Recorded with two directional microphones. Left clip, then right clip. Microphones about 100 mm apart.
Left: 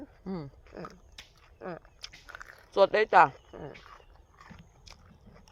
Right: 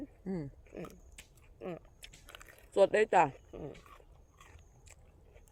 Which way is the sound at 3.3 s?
20° right (ahead or behind).